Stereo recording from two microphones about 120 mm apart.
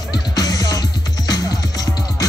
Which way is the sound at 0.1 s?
30° left (ahead or behind).